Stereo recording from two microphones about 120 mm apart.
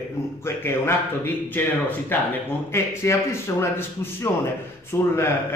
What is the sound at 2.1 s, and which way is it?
A man's voice, 15° left (ahead or behind).